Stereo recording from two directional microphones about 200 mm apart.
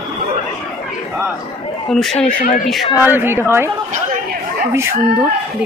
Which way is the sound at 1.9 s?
Centre (ahead or behind).